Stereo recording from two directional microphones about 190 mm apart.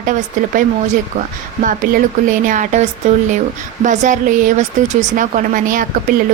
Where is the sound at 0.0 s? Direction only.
45° right (ahead or behind).